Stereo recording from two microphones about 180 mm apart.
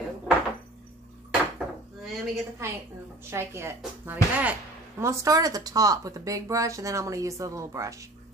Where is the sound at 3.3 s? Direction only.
15° right (ahead or behind).